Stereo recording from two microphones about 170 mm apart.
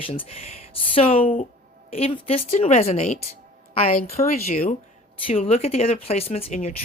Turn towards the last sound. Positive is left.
turn(degrees=40)  # may be behind; listen again after turning